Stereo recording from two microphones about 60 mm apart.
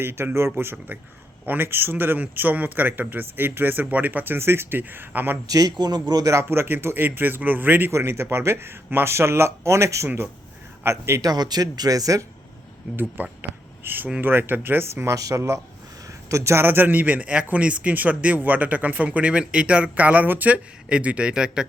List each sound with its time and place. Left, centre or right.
0.0 s a man's voice: right
4.4 s a man's voice: right
5.5 s speech: right
6.5 s a man's voice: right
7.9 s speech: right
11.2 s speech: right
13.0 s a man's voice: right
15.0 s a man's voice: right; by 21.7 s centre